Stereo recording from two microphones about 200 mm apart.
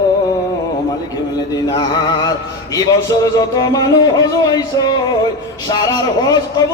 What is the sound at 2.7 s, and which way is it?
Music, 20° left (ahead or behind).